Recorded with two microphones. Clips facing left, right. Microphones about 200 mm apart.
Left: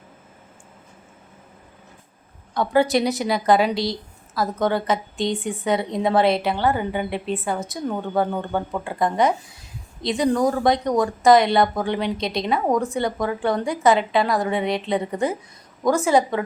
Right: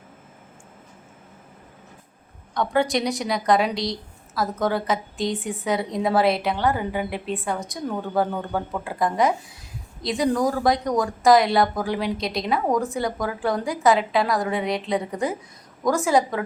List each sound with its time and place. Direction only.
2.6 s a woman's voice: 5° left (ahead or behind)